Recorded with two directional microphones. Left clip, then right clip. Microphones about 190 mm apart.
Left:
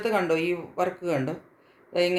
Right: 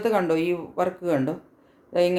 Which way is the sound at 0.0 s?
40° right (ahead or behind).